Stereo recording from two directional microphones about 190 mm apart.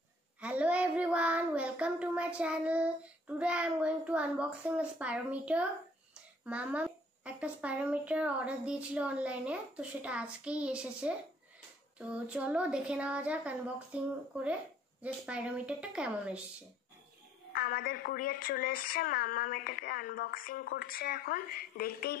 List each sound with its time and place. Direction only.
0.4 s a woman's voice: 5° right (ahead or behind)
17.5 s a woman's voice: 50° left (ahead or behind)